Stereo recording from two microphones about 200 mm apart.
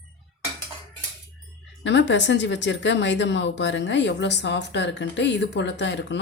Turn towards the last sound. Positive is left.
turn(degrees=60)  # may be behind; listen again after turning